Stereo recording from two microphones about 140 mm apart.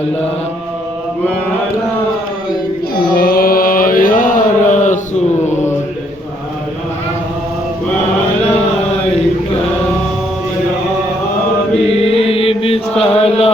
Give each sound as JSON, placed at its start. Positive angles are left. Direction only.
{"t": 3.2, "sound": "mantra", "side_deg": 90}
{"t": 11.9, "sound": "chant", "side_deg": 45}